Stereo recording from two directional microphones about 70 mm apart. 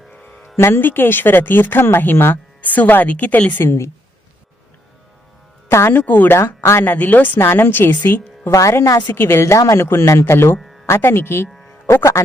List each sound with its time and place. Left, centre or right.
0.1 s music: centre
0.5 s speech: left
3.6 s speech: left
5.6 s speech: left
5.9 s speech: left
6.3 s speech: left
7.3 s speech: left
8.4 s speech: left
9.1 s speech: left